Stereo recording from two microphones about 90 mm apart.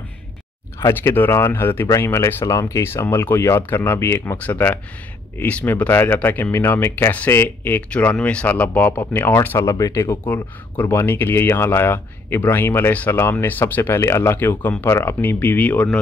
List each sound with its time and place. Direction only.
0.7 s speech: 30° left (ahead or behind)
9.7 s speech: 35° left (ahead or behind)
10.2 s speech: 20° left (ahead or behind)